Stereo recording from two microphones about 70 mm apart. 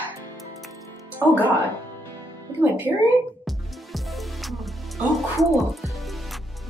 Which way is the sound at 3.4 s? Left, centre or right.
Centre.